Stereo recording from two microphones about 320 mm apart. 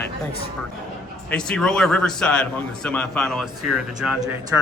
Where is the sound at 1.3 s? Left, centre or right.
Centre.